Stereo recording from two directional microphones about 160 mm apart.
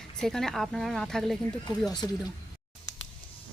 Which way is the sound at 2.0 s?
20° left (ahead or behind).